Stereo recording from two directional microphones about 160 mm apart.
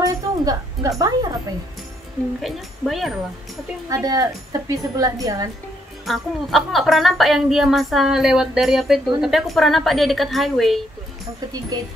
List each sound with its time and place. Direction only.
0.0 s speech: 20° right (ahead or behind)
2.4 s speech: centre (ahead or behind)
3.9 s a woman's voice: 20° right (ahead or behind)
6.0 s speech: centre (ahead or behind)